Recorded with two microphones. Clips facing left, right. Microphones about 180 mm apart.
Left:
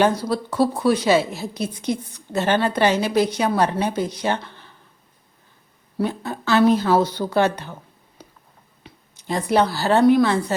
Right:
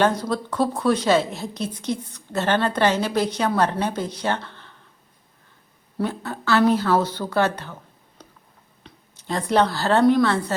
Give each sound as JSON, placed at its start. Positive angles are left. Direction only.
{"t": 0.0, "sound": "a woman's voice", "side_deg": 10}
{"t": 6.0, "sound": "a woman's voice", "side_deg": 15}
{"t": 8.8, "sound": "a sound", "side_deg": 10}
{"t": 10.1, "sound": "a woman's voice", "side_deg": 10}